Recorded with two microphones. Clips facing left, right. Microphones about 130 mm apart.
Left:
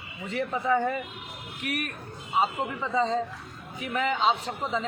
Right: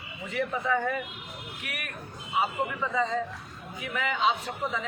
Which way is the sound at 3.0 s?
30° left (ahead or behind).